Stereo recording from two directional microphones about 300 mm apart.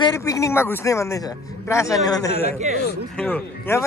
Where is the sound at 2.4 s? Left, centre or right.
Right.